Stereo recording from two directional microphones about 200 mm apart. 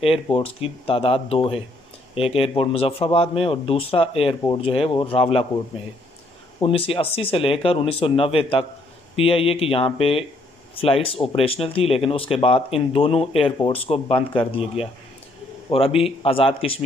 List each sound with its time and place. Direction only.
0.0 s a man's voice: 30° left (ahead or behind)
6.6 s a man's voice: 30° left (ahead or behind)
15.7 s a man's voice: 30° left (ahead or behind)